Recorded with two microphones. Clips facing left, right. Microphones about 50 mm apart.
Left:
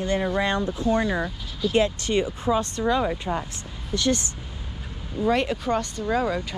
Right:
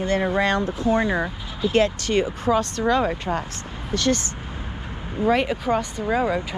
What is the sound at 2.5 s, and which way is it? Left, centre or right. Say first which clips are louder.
Speech: right 3 dB; right.